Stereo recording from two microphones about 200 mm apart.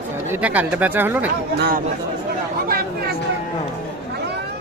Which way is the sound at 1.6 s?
45° right (ahead or behind).